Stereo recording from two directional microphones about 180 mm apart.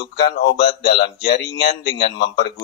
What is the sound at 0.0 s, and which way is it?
Speech, 70° left (ahead or behind).